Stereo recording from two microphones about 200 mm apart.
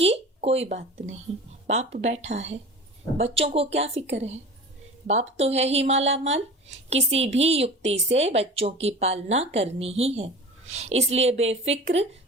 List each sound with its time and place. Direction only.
0.0 s speech: 30° right (ahead or behind)